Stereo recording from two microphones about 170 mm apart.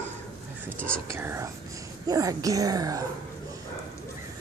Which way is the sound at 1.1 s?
15° right (ahead or behind).